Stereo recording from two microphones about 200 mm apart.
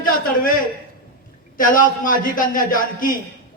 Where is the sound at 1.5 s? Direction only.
45° left (ahead or behind).